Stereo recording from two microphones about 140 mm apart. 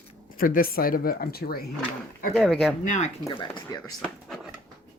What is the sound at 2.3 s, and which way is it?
Speech, centre (ahead or behind).